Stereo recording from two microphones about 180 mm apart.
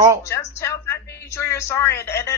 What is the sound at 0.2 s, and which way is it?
A woman's voice, 15° left (ahead or behind).